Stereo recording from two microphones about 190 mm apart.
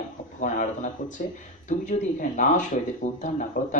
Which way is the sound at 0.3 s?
40° left (ahead or behind).